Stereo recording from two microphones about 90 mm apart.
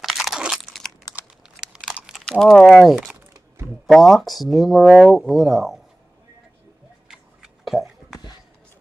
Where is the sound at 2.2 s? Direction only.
5° left (ahead or behind).